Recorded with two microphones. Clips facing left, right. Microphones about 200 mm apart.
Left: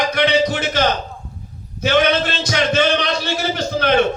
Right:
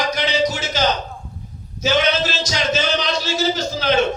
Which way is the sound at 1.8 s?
60° left (ahead or behind).